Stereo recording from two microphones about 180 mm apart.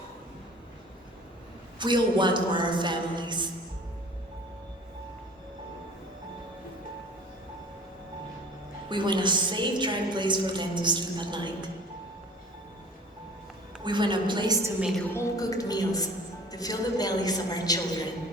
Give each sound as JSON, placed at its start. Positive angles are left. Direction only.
{"t": 1.8, "sound": "a woman's voice", "side_deg": -25}
{"t": 8.9, "sound": "a woman's voice", "side_deg": -25}
{"t": 13.8, "sound": "a woman's voice", "side_deg": -25}
{"t": 14.8, "sound": "a woman's voice", "side_deg": -5}
{"t": 15.1, "sound": "a woman's voice", "side_deg": 20}